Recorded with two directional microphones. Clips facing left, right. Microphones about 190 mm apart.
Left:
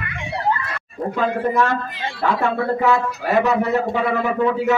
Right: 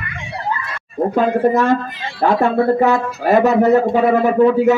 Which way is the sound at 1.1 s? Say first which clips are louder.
Right 5 dB; 45° right (ahead or behind).